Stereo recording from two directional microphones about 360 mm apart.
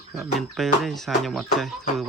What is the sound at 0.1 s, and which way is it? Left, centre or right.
Speech, centre.